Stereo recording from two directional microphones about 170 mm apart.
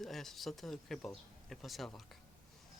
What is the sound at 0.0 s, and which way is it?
Speech, centre (ahead or behind).